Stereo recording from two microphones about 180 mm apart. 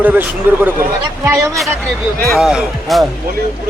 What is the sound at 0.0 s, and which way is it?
A man's voice, 10° right (ahead or behind).